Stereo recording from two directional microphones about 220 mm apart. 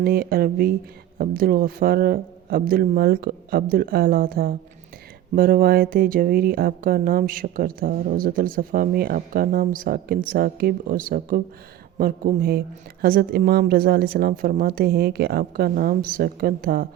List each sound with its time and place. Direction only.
0.0 s speech: 40° right (ahead or behind)